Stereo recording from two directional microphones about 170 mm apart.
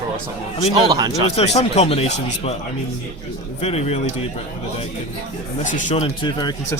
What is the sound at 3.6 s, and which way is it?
Speech, 40° left (ahead or behind).